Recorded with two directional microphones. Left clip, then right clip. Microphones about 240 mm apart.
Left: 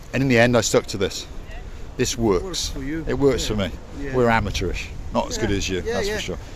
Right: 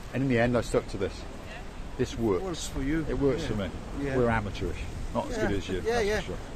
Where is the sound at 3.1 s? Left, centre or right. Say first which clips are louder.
Left 11 dB; left.